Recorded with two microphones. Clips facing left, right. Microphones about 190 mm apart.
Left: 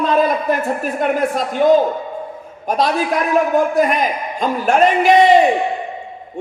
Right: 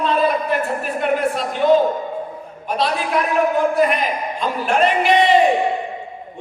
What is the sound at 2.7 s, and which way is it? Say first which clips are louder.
Speech: left 3 dB; 45° left (ahead or behind).